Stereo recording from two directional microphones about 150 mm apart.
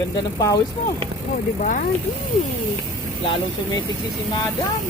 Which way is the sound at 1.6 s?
60° left (ahead or behind).